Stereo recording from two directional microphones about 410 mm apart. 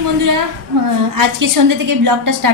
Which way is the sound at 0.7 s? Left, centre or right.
Right.